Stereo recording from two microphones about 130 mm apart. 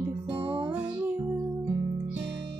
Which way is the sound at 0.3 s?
40° right (ahead or behind).